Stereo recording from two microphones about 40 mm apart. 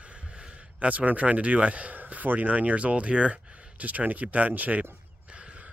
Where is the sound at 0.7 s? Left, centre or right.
Right.